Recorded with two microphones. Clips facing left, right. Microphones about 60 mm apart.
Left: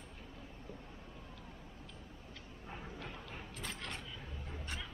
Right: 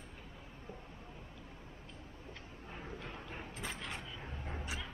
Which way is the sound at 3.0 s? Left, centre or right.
Centre.